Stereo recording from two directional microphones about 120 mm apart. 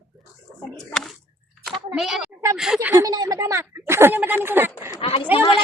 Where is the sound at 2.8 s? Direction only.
15° right (ahead or behind).